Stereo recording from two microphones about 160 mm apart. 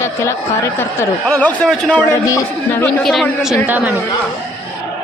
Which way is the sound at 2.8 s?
Centre (ahead or behind).